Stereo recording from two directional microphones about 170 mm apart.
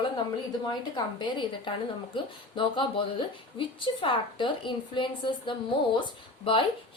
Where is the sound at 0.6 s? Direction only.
25° left (ahead or behind).